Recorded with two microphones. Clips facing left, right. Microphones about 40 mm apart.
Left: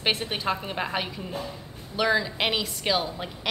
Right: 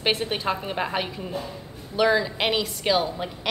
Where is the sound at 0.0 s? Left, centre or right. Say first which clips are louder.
Right 2 dB; centre.